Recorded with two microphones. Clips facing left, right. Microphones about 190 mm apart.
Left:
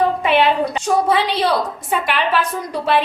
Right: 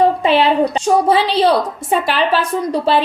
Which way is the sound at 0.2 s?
30° right (ahead or behind).